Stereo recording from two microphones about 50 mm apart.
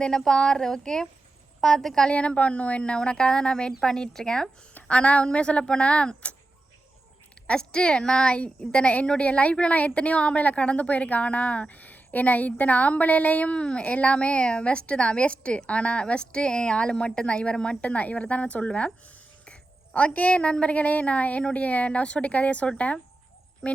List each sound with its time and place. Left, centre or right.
0.0 s a woman's voice: centre
2.0 s a woman's voice: left
4.9 s a woman's voice: left
7.4 s a woman's voice: centre